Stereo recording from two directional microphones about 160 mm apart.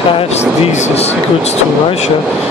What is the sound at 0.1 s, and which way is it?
Speech, 40° left (ahead or behind).